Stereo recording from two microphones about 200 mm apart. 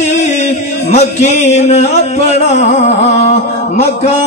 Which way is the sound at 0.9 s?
35° left (ahead or behind).